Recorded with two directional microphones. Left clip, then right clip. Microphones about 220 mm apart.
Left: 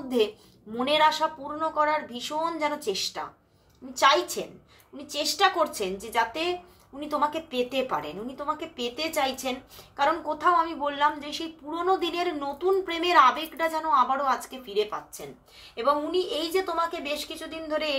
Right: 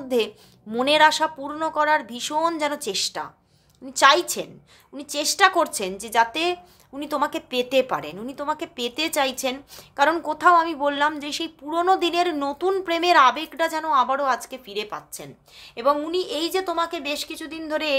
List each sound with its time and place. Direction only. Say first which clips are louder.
0.7 s a woman's voice: right 5 dB; 45° right (ahead or behind)